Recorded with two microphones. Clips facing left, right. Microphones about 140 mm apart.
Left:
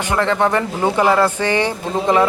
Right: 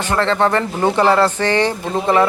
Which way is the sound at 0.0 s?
15° left (ahead or behind).